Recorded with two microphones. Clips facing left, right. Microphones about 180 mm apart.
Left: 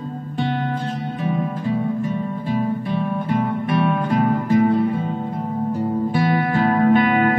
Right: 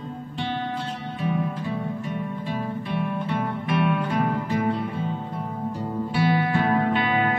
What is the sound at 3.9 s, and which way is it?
Music, 40° left (ahead or behind).